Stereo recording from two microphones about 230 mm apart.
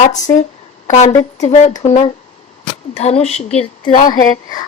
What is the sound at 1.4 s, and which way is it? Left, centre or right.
A woman's voice, left.